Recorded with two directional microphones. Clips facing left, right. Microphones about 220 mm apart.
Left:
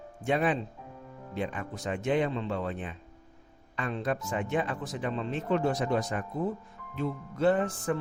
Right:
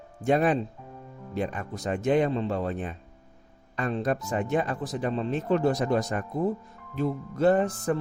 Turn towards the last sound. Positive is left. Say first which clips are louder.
# right 4 dB
turn(degrees=-40)  # may be behind; listen again after turning